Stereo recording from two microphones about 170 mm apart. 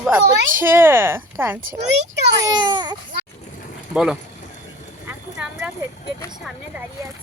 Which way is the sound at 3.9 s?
5° right (ahead or behind).